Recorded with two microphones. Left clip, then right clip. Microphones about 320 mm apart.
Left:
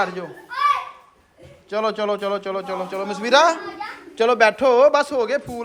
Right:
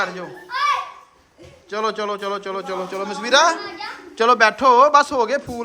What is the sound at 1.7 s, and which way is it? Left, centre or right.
Speech, centre.